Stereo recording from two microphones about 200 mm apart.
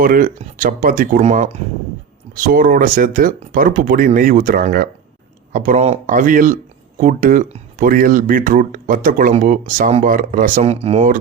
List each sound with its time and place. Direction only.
0.0 s speech: 45° right (ahead or behind)